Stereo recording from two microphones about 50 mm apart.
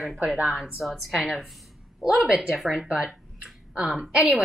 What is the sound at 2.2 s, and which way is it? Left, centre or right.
Speech, centre.